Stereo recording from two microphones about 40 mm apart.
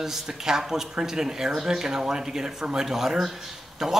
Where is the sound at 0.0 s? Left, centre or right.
Centre.